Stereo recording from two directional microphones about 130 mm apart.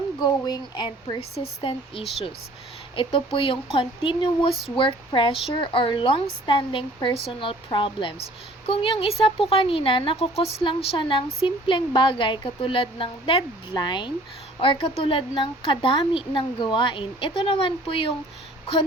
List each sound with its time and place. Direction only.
0.2 s a woman's voice: 35° left (ahead or behind)
14.6 s a woman's voice: 45° left (ahead or behind)